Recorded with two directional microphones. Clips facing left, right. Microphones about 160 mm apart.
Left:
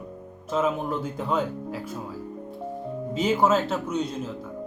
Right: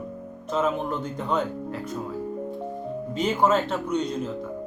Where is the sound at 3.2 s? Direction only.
Centre (ahead or behind).